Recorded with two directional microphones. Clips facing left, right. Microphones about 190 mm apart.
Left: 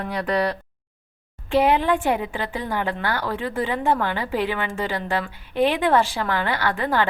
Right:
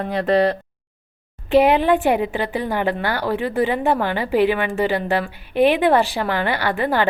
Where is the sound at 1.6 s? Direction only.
15° right (ahead or behind).